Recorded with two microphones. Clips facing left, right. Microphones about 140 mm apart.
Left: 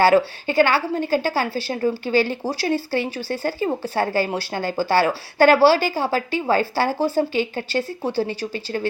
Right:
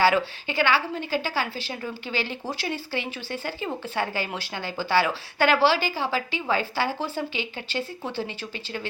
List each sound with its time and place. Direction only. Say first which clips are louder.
0.0 s a woman's voice: left 6 dB; 45° left (ahead or behind)